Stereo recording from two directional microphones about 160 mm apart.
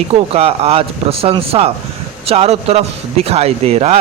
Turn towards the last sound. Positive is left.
turn(degrees=-40)  # may be behind; listen again after turning